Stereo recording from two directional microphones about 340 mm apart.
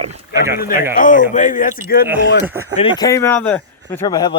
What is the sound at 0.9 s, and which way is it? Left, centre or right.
Speech, left.